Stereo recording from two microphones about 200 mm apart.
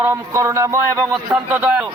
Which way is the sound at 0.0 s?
15° right (ahead or behind).